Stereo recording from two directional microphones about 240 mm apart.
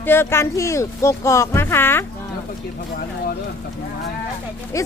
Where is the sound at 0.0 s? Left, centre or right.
Centre.